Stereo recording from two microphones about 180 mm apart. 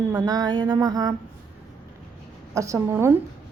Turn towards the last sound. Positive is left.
turn(degrees=-15)  # may be behind; listen again after turning